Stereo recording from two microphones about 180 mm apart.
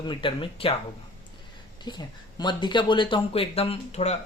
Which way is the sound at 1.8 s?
25° left (ahead or behind).